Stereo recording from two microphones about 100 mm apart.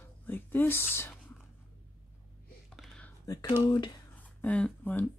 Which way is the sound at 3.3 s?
35° left (ahead or behind).